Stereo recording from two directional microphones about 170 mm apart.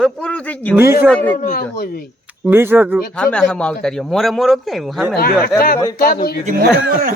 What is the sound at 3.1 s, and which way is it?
A man's voice, 5° left (ahead or behind).